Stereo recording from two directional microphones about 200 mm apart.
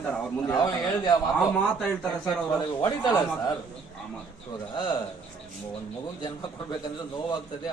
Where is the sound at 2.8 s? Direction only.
15° left (ahead or behind).